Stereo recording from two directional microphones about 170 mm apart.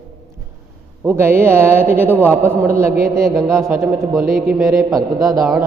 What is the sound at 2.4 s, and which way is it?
A man's voice, 15° right (ahead or behind).